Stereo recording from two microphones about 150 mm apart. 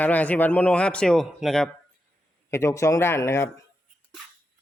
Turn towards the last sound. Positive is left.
turn(degrees=15)  # may be behind; listen again after turning